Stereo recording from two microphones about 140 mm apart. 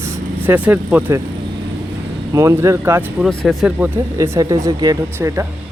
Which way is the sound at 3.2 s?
5° left (ahead or behind).